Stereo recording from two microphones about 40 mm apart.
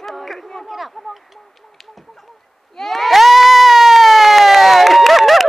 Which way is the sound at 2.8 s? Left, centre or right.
Centre.